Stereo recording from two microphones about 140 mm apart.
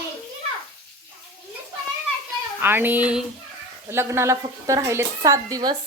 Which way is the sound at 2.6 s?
15° right (ahead or behind).